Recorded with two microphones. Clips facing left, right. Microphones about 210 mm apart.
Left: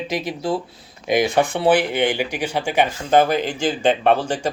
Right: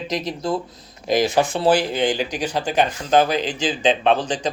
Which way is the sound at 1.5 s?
65° left (ahead or behind).